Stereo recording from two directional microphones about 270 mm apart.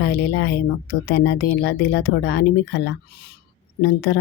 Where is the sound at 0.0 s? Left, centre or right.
Left.